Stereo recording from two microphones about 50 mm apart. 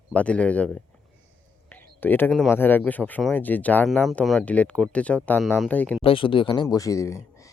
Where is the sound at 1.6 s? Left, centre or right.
Left.